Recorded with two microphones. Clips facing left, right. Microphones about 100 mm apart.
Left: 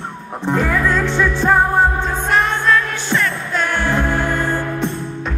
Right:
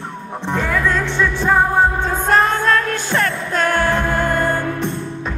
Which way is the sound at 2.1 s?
40° right (ahead or behind).